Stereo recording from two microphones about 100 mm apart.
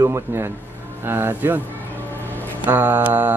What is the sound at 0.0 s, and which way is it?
A man's voice, 25° right (ahead or behind).